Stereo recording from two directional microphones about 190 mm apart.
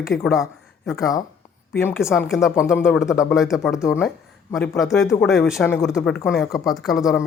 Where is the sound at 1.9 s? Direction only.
Centre (ahead or behind).